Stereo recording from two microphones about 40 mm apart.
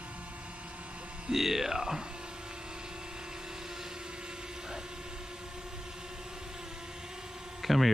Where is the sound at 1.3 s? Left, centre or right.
Centre.